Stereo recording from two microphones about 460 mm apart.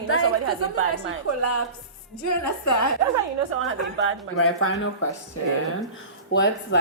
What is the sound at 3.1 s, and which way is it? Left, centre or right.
A woman's voice, right.